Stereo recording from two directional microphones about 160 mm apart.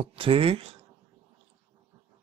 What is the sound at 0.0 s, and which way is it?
Speech, 35° right (ahead or behind).